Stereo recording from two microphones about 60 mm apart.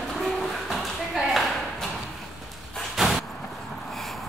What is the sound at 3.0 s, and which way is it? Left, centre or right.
Vehicle, centre.